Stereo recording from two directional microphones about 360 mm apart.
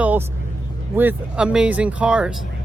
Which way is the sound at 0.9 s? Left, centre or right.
Centre.